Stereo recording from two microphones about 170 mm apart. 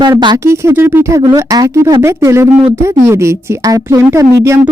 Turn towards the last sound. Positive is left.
turn(degrees=-15)  # may be behind; listen again after turning